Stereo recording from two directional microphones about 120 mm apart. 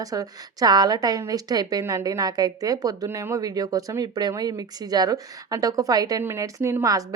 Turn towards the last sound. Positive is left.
turn(degrees=-25)  # may be behind; listen again after turning